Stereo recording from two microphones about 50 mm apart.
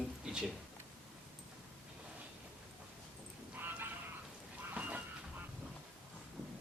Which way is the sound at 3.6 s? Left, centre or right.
Right.